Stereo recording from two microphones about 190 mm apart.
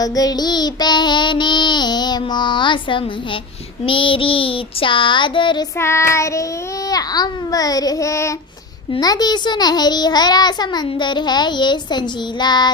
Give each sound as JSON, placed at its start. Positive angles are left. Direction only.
{"t": 0.0, "sound": "a child's voice", "side_deg": 20}
{"t": 5.8, "sound": "child singing", "side_deg": 15}
{"t": 6.9, "sound": "a child's voice", "side_deg": 20}